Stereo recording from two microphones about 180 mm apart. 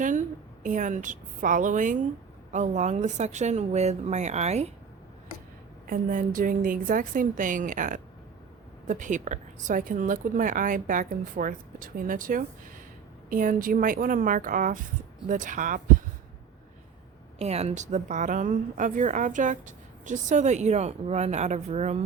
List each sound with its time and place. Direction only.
0.0 s a woman's voice: 45° right (ahead or behind)
5.9 s speech: 50° right (ahead or behind)
17.3 s a woman's voice: 35° right (ahead or behind)